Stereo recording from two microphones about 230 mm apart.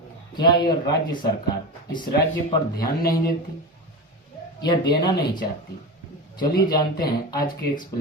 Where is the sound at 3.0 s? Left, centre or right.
Left.